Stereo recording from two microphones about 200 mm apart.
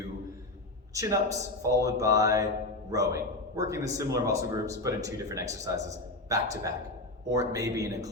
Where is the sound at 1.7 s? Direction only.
15° right (ahead or behind).